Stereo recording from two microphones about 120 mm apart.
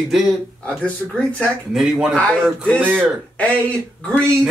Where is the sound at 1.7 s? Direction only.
5° right (ahead or behind).